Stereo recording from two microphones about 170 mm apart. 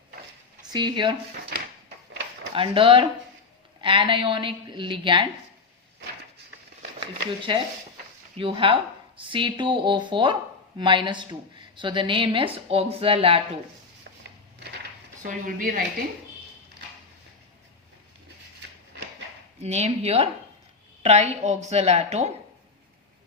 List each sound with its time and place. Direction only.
0.7 s speech: 25° right (ahead or behind)
1.3 s speech: 65° right (ahead or behind)
2.5 s a woman's voice: 30° right (ahead or behind)
7.5 s a woman's voice: 30° right (ahead or behind)
15.2 s speech: 55° right (ahead or behind)
19.6 s a woman's voice: 40° right (ahead or behind)